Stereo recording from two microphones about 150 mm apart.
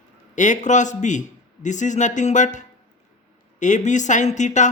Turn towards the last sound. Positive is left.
turn(degrees=55)  # may be behind; listen again after turning